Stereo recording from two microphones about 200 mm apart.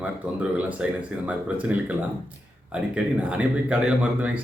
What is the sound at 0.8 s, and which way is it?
Speech, 5° right (ahead or behind).